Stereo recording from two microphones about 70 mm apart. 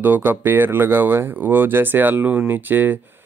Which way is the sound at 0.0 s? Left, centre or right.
Right.